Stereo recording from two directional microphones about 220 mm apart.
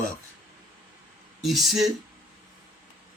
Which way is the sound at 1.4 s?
Centre (ahead or behind).